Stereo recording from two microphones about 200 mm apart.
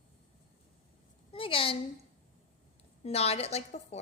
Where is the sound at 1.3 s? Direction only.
25° left (ahead or behind).